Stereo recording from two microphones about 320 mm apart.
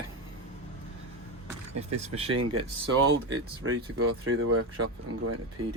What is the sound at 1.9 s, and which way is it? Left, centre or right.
Speech, centre.